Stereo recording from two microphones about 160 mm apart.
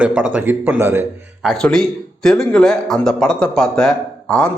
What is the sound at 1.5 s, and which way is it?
A man's voice, 5° left (ahead or behind).